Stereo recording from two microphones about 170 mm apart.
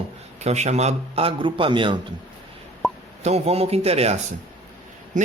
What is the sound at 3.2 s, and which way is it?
Speech, 40° right (ahead or behind).